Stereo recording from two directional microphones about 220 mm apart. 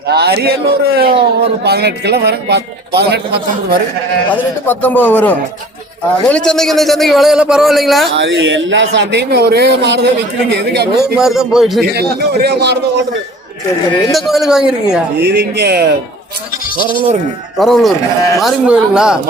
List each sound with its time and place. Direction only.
0.1 s speech: 50° right (ahead or behind)
4.6 s a man's voice: 10° left (ahead or behind)
8.1 s speech: 60° right (ahead or behind)
11.2 s a man's voice: centre (ahead or behind)
11.8 s speech: 45° right (ahead or behind)
14.1 s a man's voice: centre (ahead or behind)
15.2 s speech: 50° right (ahead or behind)
17.6 s a man's voice: centre (ahead or behind)